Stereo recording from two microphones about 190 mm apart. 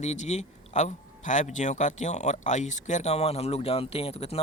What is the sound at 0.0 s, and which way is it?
Speech, 35° left (ahead or behind).